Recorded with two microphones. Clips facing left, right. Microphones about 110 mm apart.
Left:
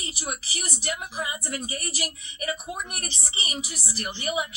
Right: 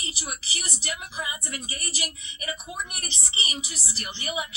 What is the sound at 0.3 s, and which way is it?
A woman's voice, 35° left (ahead or behind).